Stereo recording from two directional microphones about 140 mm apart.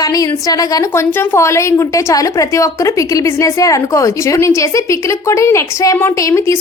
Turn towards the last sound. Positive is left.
turn(degrees=20)  # may be behind; listen again after turning